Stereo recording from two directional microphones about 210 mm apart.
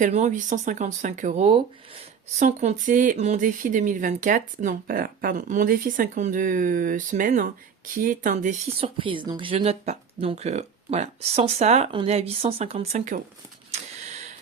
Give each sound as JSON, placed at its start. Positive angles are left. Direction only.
{"t": 0.0, "sound": "speech", "side_deg": -35}
{"t": 8.8, "sound": "speech", "side_deg": -25}
{"t": 13.7, "sound": "a sound", "side_deg": -30}